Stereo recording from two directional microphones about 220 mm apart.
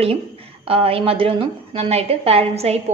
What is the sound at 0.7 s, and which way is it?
A woman's voice, 25° right (ahead or behind).